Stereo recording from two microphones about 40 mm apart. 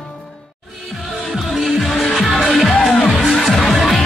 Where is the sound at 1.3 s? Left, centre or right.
Centre.